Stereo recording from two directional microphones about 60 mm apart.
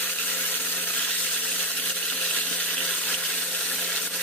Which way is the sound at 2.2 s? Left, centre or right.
Left.